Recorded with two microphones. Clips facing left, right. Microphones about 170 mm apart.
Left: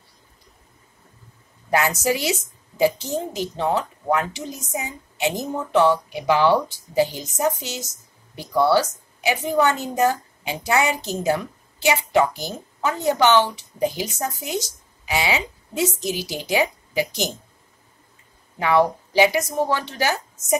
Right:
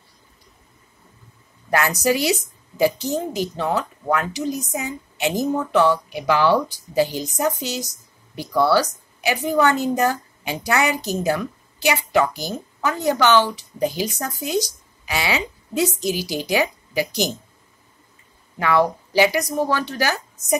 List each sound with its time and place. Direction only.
1.7 s a woman's voice: 20° left (ahead or behind)
18.6 s a woman's voice: 20° left (ahead or behind)